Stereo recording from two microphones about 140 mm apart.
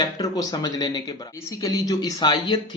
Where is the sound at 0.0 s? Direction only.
25° left (ahead or behind).